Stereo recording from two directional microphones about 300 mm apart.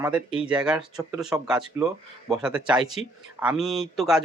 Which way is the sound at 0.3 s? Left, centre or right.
Centre.